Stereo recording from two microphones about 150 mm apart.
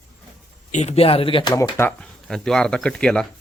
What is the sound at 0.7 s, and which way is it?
Speech, 50° left (ahead or behind).